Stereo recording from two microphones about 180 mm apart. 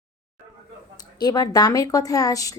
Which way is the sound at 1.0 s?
20° left (ahead or behind).